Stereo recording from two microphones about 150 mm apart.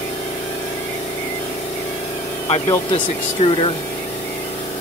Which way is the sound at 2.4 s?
50° left (ahead or behind).